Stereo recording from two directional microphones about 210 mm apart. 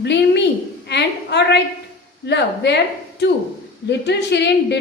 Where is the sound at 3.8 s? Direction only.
55° left (ahead or behind).